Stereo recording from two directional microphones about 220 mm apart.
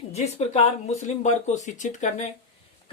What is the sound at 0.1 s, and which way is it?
Speech, 30° left (ahead or behind).